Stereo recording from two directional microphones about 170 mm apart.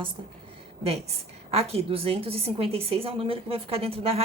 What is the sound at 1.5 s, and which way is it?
A woman's voice, 35° right (ahead or behind).